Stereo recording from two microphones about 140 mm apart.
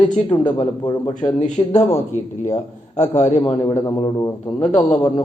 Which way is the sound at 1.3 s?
55° left (ahead or behind).